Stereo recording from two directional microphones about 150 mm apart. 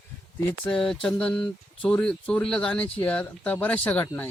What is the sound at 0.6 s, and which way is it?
A man's voice, 5° left (ahead or behind).